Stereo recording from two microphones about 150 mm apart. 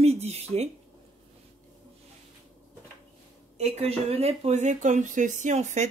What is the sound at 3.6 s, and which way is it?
Speech, 40° right (ahead or behind).